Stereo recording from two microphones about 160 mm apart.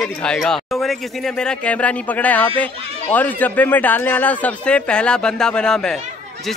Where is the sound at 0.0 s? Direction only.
5° left (ahead or behind).